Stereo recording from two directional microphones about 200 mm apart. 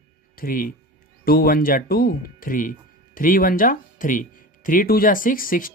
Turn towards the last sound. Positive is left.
turn(degrees=45)  # may be behind; listen again after turning